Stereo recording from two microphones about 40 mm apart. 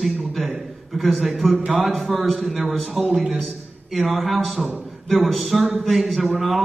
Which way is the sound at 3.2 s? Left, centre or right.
Right.